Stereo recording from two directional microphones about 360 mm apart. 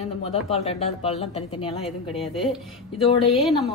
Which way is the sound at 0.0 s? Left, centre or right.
Centre.